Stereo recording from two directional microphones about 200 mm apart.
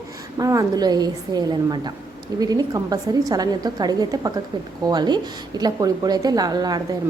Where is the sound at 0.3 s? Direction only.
15° right (ahead or behind).